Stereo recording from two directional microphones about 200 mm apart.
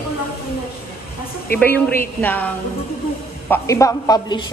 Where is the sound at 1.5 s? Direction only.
10° left (ahead or behind).